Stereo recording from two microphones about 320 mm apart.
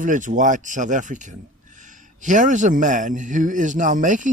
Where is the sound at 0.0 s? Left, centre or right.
Right.